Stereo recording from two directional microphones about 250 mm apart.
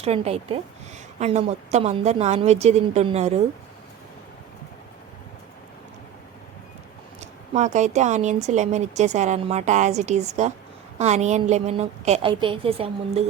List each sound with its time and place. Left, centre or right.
0.0 s speech: right
7.2 s speech: right